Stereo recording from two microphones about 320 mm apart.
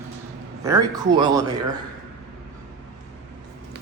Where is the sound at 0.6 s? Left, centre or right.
Centre.